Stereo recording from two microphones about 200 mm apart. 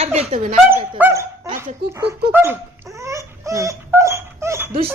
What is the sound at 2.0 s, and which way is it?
Dog, 10° right (ahead or behind).